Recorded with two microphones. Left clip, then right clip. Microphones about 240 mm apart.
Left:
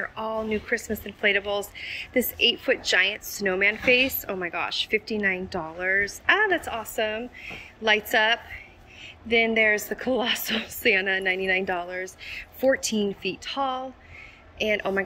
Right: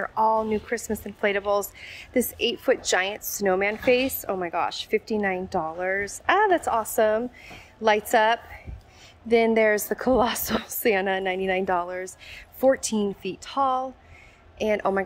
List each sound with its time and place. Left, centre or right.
0.0 s speech: centre